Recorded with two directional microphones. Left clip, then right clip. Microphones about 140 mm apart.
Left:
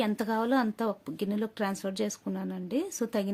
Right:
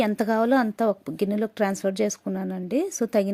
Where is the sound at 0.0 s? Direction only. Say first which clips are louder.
Right 7 dB; 35° right (ahead or behind).